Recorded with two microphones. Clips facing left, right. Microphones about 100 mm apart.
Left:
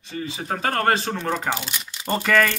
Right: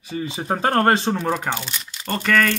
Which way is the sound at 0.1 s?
20° right (ahead or behind).